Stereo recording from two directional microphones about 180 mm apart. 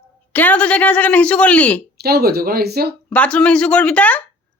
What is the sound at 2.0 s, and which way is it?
Speech, 60° right (ahead or behind).